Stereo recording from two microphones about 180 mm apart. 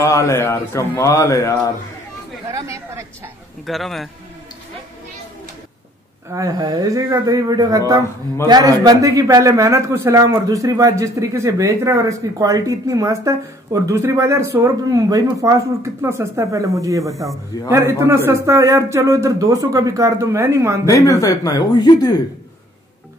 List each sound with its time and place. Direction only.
0.0 s speech: 15° left (ahead or behind)
2.5 s a man's voice: 15° right (ahead or behind)
3.6 s a man's voice: centre (ahead or behind)
6.3 s a man's voice: 20° right (ahead or behind)
20.9 s speech: 20° left (ahead or behind)